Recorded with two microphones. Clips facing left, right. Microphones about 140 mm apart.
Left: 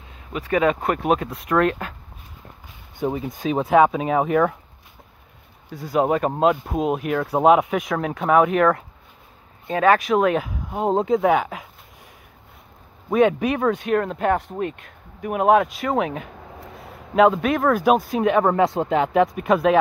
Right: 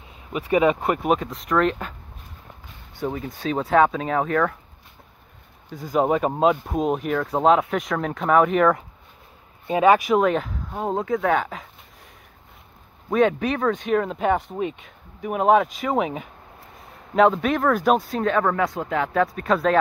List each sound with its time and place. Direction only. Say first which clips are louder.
0.3 s speech: right 1 dB; 10° right (ahead or behind)
3.0 s speech: left 3 dB; 15° left (ahead or behind)
5.7 s speech: left 1 dB; 5° left (ahead or behind)
10.9 s speech: left 4 dB; 25° left (ahead or behind)
11.3 s speech: left 2 dB; 10° left (ahead or behind)
13.1 s speech: left 2 dB; 5° left (ahead or behind)